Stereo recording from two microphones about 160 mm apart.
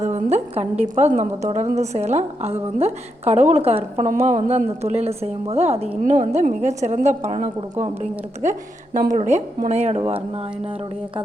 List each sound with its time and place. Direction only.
0.0 s a woman's voice: 45° right (ahead or behind)